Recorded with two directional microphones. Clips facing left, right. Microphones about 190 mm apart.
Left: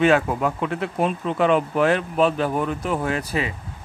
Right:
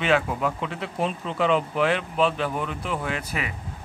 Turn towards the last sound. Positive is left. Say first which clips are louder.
# left 5 dB
turn(degrees=35)  # may be behind; listen again after turning